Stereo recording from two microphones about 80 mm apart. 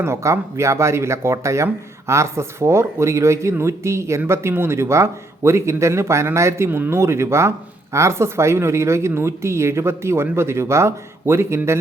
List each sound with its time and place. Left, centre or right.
0.0 s a woman's voice: right